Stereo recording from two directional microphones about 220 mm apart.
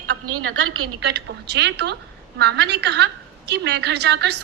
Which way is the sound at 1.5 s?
50° right (ahead or behind).